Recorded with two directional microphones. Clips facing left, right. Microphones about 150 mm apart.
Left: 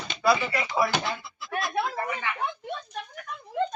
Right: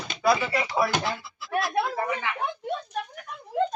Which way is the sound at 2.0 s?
15° right (ahead or behind).